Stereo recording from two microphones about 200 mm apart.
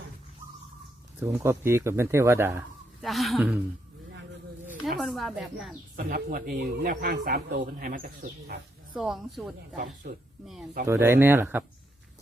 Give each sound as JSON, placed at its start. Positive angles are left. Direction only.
{"t": 1.2, "sound": "speech", "side_deg": -10}
{"t": 3.0, "sound": "speech", "side_deg": 0}
{"t": 4.7, "sound": "speech", "side_deg": 0}
{"t": 6.0, "sound": "speech", "side_deg": -45}
{"t": 9.0, "sound": "speech", "side_deg": 0}
{"t": 9.7, "sound": "speech", "side_deg": -45}
{"t": 10.4, "sound": "speech", "side_deg": 0}
{"t": 10.8, "sound": "speech", "side_deg": -10}